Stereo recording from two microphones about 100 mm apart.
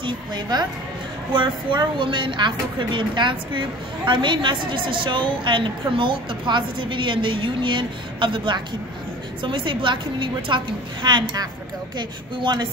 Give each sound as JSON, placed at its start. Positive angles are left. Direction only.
{"t": 0.0, "sound": "speech", "side_deg": -45}